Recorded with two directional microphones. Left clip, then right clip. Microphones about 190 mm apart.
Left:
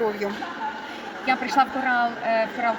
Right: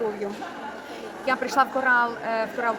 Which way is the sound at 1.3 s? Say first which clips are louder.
Left 1 dB; 20° right (ahead or behind).